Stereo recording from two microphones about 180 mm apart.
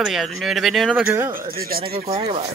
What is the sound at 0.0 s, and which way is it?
Speech, centre (ahead or behind).